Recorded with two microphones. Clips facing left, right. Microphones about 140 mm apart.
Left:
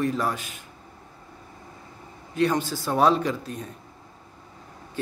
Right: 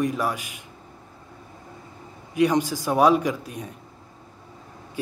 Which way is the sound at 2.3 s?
15° right (ahead or behind).